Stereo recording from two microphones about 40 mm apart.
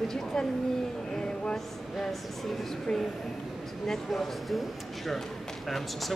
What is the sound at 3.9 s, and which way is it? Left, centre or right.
Speech, centre.